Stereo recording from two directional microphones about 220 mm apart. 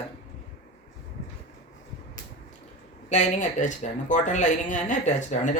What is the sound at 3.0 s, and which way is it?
Speech, 35° left (ahead or behind).